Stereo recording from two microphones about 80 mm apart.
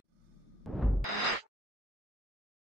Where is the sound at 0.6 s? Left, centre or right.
Centre.